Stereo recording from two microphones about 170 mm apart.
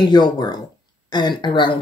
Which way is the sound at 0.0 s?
25° left (ahead or behind).